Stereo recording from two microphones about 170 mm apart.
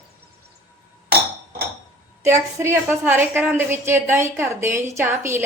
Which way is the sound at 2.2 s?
15° right (ahead or behind).